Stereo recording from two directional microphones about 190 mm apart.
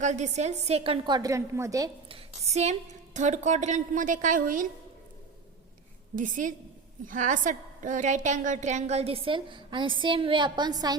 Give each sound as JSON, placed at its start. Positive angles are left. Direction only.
{"t": 0.0, "sound": "a woman's voice", "side_deg": -40}
{"t": 2.0, "sound": "a woman's voice", "side_deg": -30}
{"t": 6.1, "sound": "a woman's voice", "side_deg": -45}